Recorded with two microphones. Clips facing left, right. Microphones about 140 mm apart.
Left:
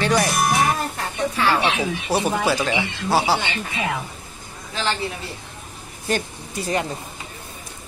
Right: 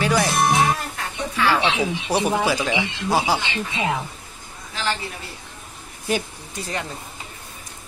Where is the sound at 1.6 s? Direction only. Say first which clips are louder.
Even; 20° right (ahead or behind).